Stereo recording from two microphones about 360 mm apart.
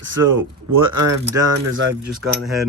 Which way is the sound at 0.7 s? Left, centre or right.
Right.